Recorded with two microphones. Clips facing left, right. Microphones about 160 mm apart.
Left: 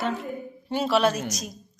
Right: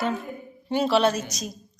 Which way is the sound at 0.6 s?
Centre (ahead or behind).